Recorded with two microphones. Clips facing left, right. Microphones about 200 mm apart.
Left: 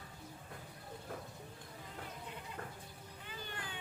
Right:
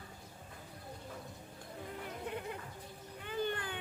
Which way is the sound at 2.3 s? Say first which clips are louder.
Right 6 dB; 60° right (ahead or behind).